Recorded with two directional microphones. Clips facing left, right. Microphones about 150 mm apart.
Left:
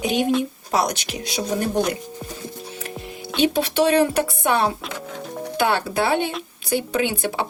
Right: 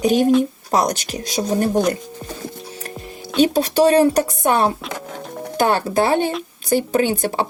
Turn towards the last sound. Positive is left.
turn(degrees=-45)  # may be behind; listen again after turning